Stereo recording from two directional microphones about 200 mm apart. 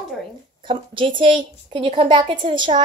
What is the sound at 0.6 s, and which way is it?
A woman's voice, 25° right (ahead or behind).